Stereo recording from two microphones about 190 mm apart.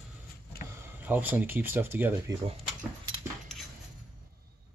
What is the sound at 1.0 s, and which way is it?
Speech, 10° right (ahead or behind).